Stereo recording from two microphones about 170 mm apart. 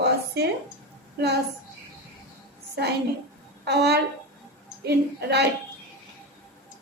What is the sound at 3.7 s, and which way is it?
A woman's voice, 75° right (ahead or behind).